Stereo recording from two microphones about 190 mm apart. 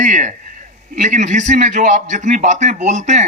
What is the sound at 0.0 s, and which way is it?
Speech, 40° right (ahead or behind).